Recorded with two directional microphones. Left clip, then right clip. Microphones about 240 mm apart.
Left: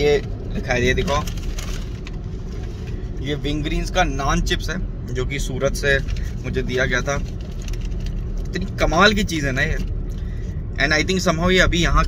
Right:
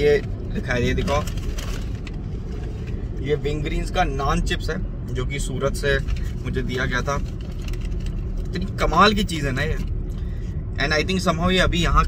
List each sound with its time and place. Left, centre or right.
0.7 s speech: centre
3.3 s speech: left
5.1 s speech: centre
8.5 s speech: centre
10.8 s speech: centre